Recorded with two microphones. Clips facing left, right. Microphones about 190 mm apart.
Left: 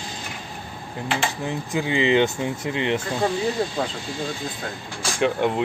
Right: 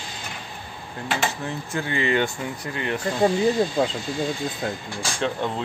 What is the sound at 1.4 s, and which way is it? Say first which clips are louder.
Speech: left 3 dB; 15° left (ahead or behind).